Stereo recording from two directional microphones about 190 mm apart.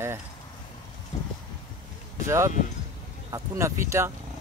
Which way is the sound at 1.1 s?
25° left (ahead or behind).